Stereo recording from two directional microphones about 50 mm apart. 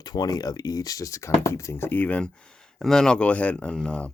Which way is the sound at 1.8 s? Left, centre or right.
Left.